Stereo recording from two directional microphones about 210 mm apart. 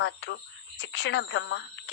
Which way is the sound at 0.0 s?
60° left (ahead or behind).